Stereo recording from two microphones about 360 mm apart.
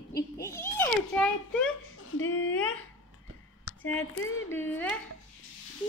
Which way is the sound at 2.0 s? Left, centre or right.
Left.